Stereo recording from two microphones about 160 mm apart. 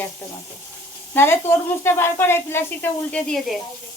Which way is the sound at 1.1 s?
15° left (ahead or behind).